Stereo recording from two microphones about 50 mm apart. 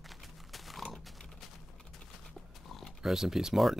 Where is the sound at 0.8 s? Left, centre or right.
Centre.